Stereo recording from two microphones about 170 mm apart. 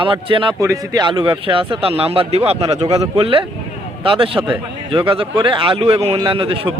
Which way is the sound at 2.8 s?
20° right (ahead or behind).